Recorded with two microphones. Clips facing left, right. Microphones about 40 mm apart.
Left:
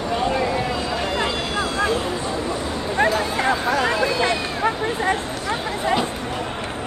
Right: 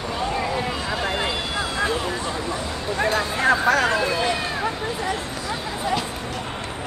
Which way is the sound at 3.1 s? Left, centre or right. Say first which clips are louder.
Right 1 dB; right.